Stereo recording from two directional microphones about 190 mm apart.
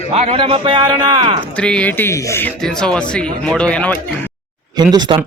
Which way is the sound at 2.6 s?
5° left (ahead or behind).